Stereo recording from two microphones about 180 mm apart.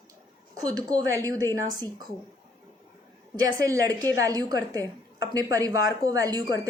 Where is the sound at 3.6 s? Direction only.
20° right (ahead or behind).